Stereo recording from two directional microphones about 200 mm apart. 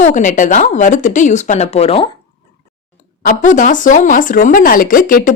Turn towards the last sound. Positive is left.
turn(degrees=45)  # may be behind; listen again after turning